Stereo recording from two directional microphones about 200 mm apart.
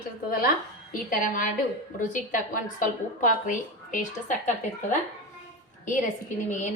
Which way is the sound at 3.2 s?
40° left (ahead or behind).